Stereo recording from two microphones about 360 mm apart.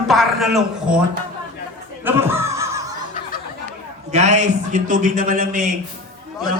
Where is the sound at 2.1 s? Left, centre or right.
Centre.